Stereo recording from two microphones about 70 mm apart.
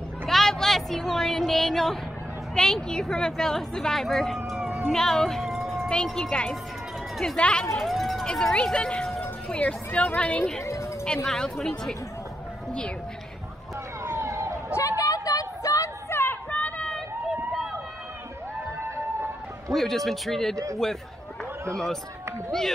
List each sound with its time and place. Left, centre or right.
0.3 s speech: centre
4.5 s a sound: centre
4.9 s music: centre
6.0 s speech: centre
7.3 s speech: centre
7.7 s speech: centre
10.6 s music: left
11.2 s speech: centre
14.0 s emergency vehicle: right
14.8 s a sound: left
16.1 s a sound: left
16.4 s a sound: centre
19.7 s speech: centre